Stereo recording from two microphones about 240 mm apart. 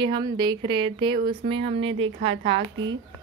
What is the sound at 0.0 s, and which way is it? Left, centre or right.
A woman's voice, centre.